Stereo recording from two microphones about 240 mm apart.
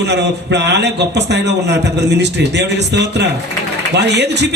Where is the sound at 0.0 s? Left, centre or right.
Right.